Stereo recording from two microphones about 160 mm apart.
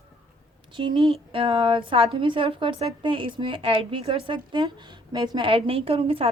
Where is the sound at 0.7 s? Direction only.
30° right (ahead or behind).